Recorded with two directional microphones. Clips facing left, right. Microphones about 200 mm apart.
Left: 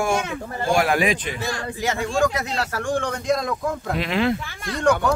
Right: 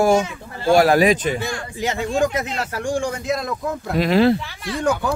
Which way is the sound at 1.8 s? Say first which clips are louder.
Right 2 dB; 20° right (ahead or behind).